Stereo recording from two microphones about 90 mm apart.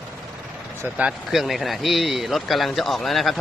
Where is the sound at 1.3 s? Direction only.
Centre (ahead or behind).